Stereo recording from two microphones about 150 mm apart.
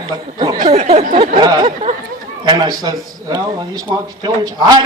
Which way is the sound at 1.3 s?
30° right (ahead or behind).